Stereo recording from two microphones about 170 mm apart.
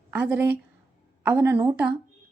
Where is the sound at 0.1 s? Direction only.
10° right (ahead or behind).